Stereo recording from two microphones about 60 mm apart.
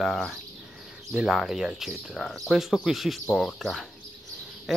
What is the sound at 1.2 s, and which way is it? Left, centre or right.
Speech, centre.